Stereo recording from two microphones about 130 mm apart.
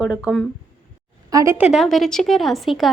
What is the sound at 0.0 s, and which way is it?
Speech, centre (ahead or behind).